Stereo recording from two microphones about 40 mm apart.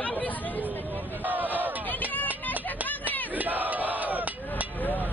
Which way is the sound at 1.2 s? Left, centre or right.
Right.